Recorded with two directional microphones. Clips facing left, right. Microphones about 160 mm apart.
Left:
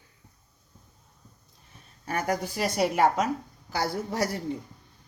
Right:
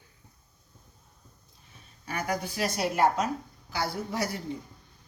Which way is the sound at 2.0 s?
55° left (ahead or behind).